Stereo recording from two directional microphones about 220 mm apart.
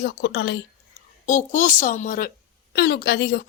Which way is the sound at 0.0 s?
55° left (ahead or behind).